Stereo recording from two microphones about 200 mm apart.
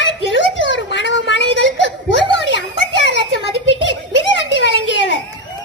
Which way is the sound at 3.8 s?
65° left (ahead or behind).